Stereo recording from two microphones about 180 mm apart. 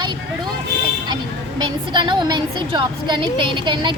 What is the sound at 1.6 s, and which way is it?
A woman's voice, 25° right (ahead or behind).